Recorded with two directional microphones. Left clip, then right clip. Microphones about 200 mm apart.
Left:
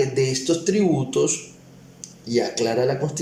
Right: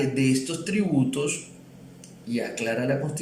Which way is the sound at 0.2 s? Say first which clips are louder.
Left 4 dB; 25° left (ahead or behind).